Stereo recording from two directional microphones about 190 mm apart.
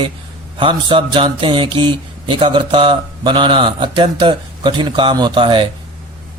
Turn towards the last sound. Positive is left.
turn(degrees=-25)  # may be behind; listen again after turning